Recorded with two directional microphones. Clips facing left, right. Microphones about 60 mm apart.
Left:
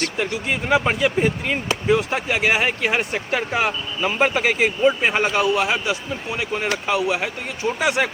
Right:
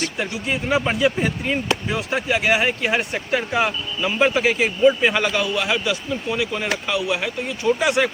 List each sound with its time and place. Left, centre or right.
0.0 s speech: left
4.0 s speech: left